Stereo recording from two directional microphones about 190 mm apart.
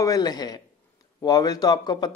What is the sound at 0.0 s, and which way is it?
Speech, 20° left (ahead or behind).